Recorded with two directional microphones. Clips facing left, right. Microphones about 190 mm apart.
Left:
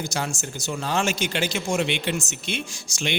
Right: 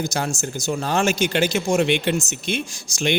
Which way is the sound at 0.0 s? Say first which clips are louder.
Right 4 dB; 40° right (ahead or behind).